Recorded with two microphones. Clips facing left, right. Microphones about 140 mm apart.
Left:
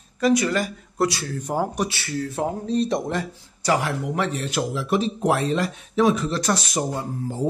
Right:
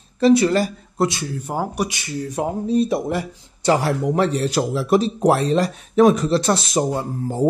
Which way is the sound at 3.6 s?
35° right (ahead or behind).